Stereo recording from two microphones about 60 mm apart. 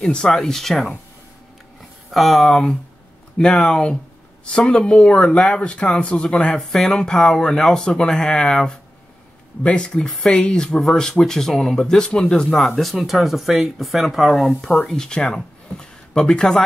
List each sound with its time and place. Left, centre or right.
0.0 s speech: centre
2.0 s speech: centre
14.9 s speech: centre